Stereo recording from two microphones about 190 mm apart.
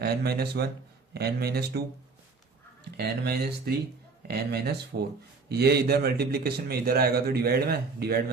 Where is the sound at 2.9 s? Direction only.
60° right (ahead or behind).